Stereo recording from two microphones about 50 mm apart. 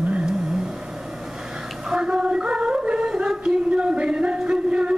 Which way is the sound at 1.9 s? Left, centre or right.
Centre.